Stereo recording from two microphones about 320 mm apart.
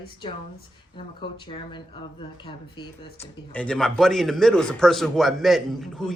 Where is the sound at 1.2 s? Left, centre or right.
Centre.